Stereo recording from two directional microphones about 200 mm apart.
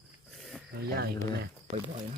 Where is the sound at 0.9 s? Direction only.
50° right (ahead or behind).